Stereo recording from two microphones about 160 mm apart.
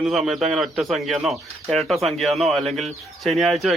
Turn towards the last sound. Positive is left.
turn(degrees=0)  # may be behind; listen again after turning